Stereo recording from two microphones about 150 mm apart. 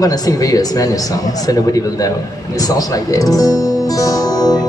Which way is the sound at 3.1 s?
25° left (ahead or behind).